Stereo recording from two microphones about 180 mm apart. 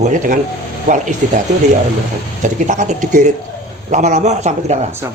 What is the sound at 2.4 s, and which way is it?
Speech, 45° right (ahead or behind).